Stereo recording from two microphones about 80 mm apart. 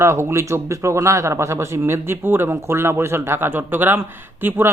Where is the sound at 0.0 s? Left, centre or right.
Right.